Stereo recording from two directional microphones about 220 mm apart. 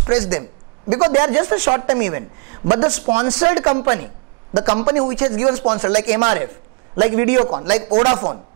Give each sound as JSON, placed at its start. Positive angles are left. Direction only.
{"t": 0.0, "sound": "speech", "side_deg": -20}